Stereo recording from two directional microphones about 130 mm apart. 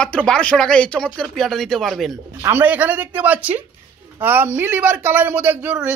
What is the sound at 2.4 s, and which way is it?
Speech, 15° right (ahead or behind).